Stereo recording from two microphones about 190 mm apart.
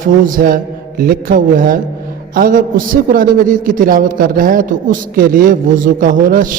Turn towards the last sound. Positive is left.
turn(degrees=-45)  # may be behind; listen again after turning